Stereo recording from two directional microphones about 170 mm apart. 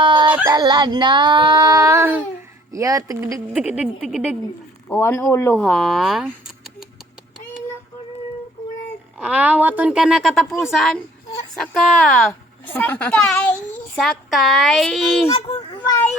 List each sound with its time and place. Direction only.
0.0 s a sound: 25° right (ahead or behind)
0.4 s speech: 25° right (ahead or behind)
3.3 s speech: 10° right (ahead or behind)
4.9 s speech: 10° left (ahead or behind)
9.1 s a woman's voice: 10° right (ahead or behind)
12.3 s a woman's voice: 15° left (ahead or behind)